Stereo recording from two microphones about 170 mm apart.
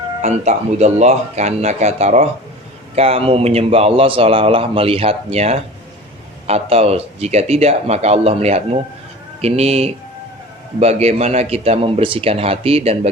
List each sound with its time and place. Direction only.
0.2 s a man's voice: 40° right (ahead or behind)